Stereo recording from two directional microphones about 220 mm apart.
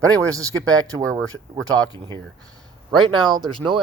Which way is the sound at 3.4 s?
20° right (ahead or behind).